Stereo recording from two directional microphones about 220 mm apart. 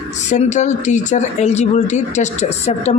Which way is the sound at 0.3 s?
35° left (ahead or behind).